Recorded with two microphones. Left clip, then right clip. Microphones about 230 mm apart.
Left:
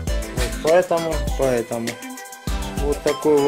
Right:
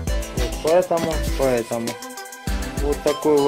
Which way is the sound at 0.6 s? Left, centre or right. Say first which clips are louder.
Left 1 dB; centre.